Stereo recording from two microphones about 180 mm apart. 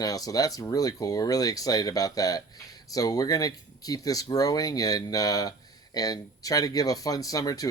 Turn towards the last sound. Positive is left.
turn(degrees=20)  # may be behind; listen again after turning